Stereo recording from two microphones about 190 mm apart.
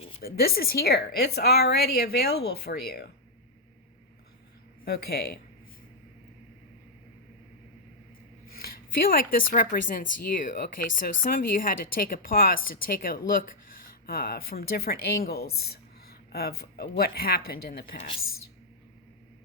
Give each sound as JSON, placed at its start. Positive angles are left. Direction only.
{"t": 0.2, "sound": "a woman's voice", "side_deg": 50}
{"t": 4.9, "sound": "a woman's voice", "side_deg": 55}
{"t": 8.4, "sound": "a woman's voice", "side_deg": 50}